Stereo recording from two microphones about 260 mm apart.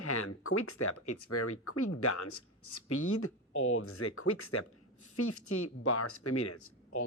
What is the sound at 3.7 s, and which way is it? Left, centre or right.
Speech, left.